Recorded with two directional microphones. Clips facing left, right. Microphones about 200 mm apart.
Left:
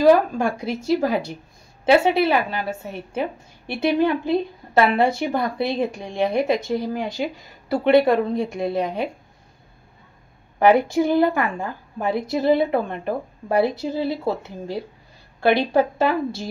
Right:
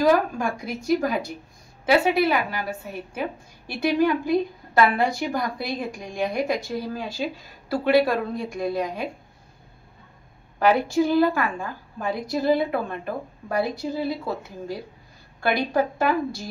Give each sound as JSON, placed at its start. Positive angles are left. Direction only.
{"t": 0.4, "sound": "a woman's voice", "side_deg": 25}
{"t": 10.6, "sound": "a woman's voice", "side_deg": 20}